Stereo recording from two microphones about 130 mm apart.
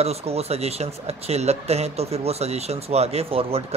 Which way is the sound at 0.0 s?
50° right (ahead or behind).